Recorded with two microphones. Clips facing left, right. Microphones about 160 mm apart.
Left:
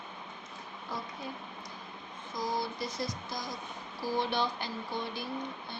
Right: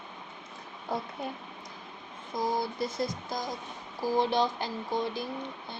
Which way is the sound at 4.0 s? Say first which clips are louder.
Right 5 dB; 45° right (ahead or behind).